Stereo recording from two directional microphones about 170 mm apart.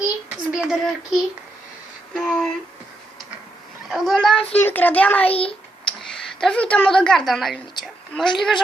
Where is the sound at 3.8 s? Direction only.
Centre (ahead or behind).